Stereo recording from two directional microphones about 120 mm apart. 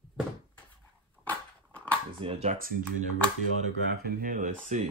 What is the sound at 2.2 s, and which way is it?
Speech, 50° right (ahead or behind).